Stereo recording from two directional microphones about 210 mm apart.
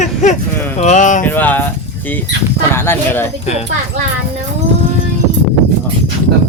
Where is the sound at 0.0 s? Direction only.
35° left (ahead or behind).